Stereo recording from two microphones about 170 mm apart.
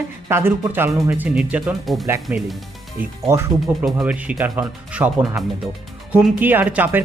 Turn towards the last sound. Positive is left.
turn(degrees=-10)  # may be behind; listen again after turning